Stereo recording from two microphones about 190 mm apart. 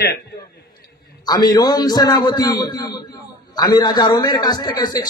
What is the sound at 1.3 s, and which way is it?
A man's voice, 20° left (ahead or behind).